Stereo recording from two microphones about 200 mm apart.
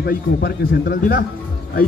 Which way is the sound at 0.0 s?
55° left (ahead or behind).